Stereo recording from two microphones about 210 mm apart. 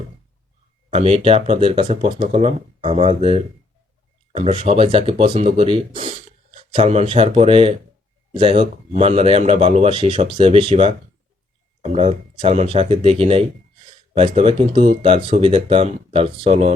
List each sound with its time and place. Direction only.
0.9 s speech: 30° right (ahead or behind)